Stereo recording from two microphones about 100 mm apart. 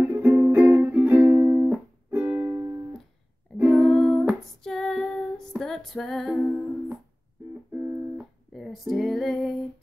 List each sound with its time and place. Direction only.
0.0 s music: 20° right (ahead or behind)
3.8 s music: centre (ahead or behind)
4.6 s female singing: 5° left (ahead or behind)
5.6 s music: 5° left (ahead or behind)
8.5 s music: centre (ahead or behind)